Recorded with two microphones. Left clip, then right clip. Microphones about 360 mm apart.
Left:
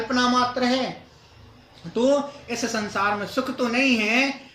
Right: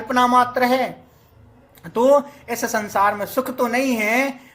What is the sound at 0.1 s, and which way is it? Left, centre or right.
Speech, right.